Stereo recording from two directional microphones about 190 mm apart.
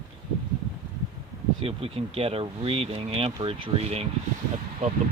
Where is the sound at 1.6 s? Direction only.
30° right (ahead or behind).